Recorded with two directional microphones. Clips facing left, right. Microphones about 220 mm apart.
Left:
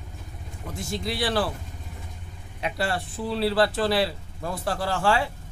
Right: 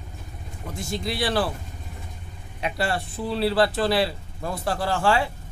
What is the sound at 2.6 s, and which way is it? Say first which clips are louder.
Speech: right 1 dB; 15° right (ahead or behind).